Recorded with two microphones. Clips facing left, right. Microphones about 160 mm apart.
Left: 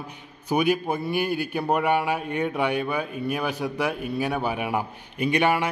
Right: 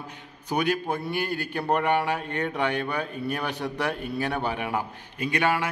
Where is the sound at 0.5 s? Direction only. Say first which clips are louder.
Left 3 dB; 10° left (ahead or behind).